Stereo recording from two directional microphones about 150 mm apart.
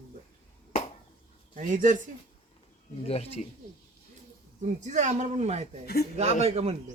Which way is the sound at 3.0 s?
45° left (ahead or behind).